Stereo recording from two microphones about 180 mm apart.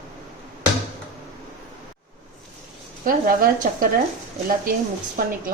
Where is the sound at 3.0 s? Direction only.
50° right (ahead or behind).